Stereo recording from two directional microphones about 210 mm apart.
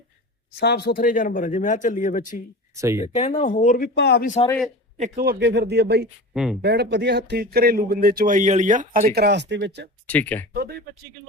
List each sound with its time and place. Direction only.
0.5 s speech: 50° left (ahead or behind)
2.7 s speech: 15° right (ahead or behind)
3.0 s speech: 30° left (ahead or behind); by 4.3 s 50° left (ahead or behind)
4.4 s speech: 5° left (ahead or behind)
4.9 s speech: 40° right (ahead or behind)
6.3 s speech: 5° right (ahead or behind)
6.6 s speech: 55° right (ahead or behind)
10.1 s speech: 5° left (ahead or behind)
10.5 s speech: 45° right (ahead or behind)